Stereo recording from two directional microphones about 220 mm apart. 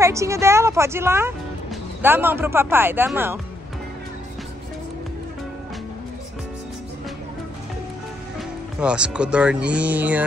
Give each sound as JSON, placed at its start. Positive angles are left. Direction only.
{"t": 0.0, "sound": "speech", "side_deg": -15}
{"t": 8.7, "sound": "speech", "side_deg": -5}